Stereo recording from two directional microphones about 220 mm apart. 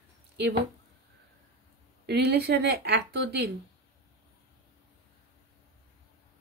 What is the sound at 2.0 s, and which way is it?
A woman's voice, 50° right (ahead or behind).